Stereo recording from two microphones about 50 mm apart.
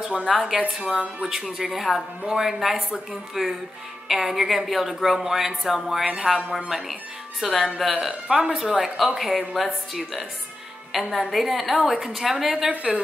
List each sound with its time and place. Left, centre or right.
0.2 s a woman's voice: centre
12.6 s a woman's voice: centre